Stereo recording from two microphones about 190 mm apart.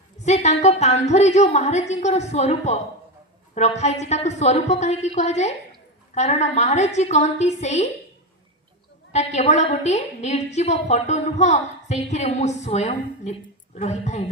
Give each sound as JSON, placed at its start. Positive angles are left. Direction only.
{"t": 0.3, "sound": "a woman's voice", "side_deg": 35}
{"t": 9.1, "sound": "a woman's voice", "side_deg": 35}